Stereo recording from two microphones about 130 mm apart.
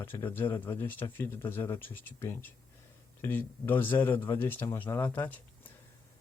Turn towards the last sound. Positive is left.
turn(degrees=15)  # may be behind; listen again after turning